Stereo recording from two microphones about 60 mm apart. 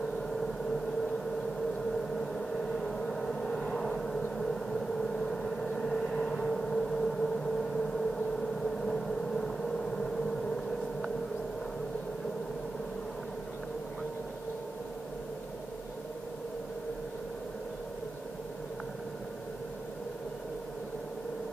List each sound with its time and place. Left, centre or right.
2.1 s vehicle: centre
4.4 s a sound: centre
5.8 s vehicle: centre